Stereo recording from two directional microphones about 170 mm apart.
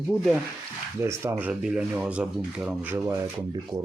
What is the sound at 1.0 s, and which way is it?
Speech, 15° right (ahead or behind).